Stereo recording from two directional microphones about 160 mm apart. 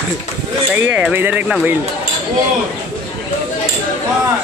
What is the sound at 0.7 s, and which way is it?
Speech, 10° right (ahead or behind).